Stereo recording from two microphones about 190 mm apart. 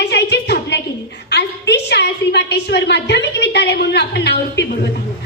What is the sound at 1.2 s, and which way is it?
A woman's voice, 60° left (ahead or behind).